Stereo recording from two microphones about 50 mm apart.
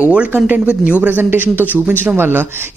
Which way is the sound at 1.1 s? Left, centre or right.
Right.